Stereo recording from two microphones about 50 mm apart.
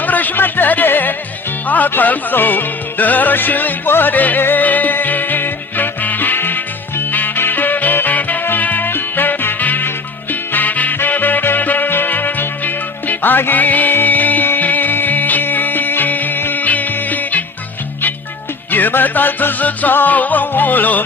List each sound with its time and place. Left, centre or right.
0.0 s music: left
1.6 s speech: left
1.9 s music: left
18.7 s music: left